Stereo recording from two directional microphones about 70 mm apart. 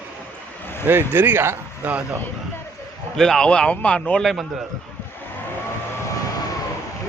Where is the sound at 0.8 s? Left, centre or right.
Right.